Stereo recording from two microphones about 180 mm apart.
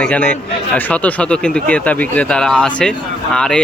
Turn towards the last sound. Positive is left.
turn(degrees=5)  # may be behind; listen again after turning